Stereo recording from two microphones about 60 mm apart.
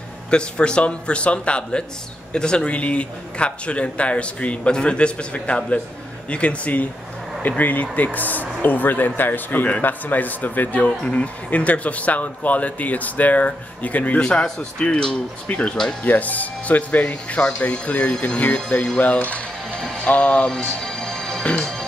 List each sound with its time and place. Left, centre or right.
0.3 s a man's voice: centre
20.1 s music: left; by 21.8 s centre